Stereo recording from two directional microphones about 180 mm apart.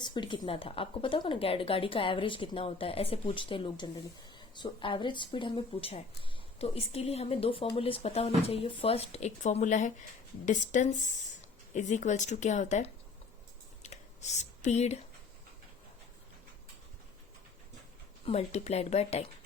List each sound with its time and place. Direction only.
0.0 s a woman's voice: 25° left (ahead or behind); by 12.9 s 40° left (ahead or behind)
13.8 s a sound: 40° left (ahead or behind)
18.3 s speech: 35° left (ahead or behind)